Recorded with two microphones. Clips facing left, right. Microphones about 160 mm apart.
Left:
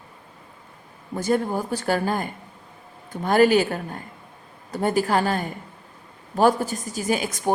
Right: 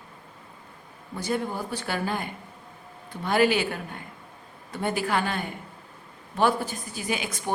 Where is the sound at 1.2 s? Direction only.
45° left (ahead or behind).